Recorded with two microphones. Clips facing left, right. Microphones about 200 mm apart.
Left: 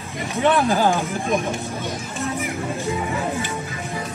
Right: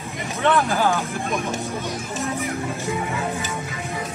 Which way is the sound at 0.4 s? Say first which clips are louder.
Left 2 dB; 15° left (ahead or behind).